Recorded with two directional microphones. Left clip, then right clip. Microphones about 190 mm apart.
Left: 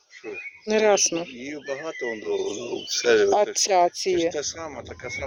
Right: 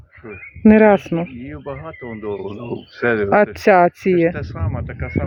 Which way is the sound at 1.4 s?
70° left (ahead or behind).